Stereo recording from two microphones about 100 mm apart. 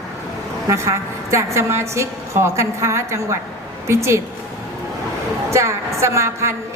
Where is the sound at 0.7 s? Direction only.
30° right (ahead or behind).